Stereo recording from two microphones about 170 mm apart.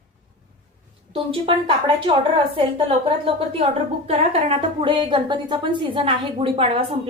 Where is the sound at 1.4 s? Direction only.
30° right (ahead or behind).